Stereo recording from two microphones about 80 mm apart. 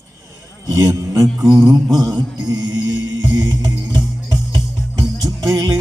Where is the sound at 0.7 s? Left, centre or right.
Right.